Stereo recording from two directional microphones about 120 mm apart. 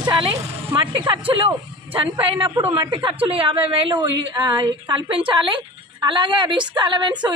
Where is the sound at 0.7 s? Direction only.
45° right (ahead or behind).